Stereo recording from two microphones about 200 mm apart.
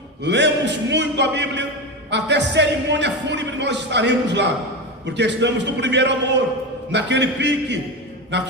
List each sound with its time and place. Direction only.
0.3 s speech: 60° right (ahead or behind)